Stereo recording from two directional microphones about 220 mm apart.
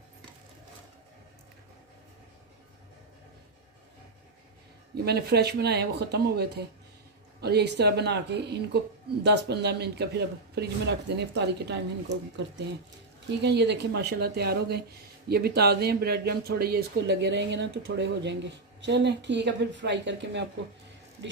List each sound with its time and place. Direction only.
5.0 s speech: 45° right (ahead or behind)